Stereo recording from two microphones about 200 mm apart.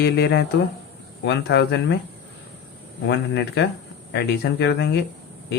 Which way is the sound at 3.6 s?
60° left (ahead or behind).